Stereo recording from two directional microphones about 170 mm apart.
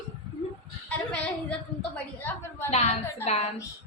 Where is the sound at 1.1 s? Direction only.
5° left (ahead or behind).